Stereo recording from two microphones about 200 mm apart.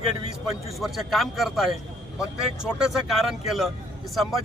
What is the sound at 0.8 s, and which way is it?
Speech, centre (ahead or behind).